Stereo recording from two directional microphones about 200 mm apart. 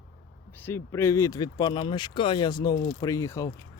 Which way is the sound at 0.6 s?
10° left (ahead or behind).